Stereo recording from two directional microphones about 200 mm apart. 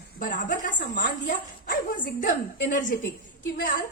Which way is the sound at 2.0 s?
40° left (ahead or behind).